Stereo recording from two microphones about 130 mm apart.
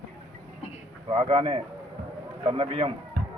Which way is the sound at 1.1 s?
50° right (ahead or behind).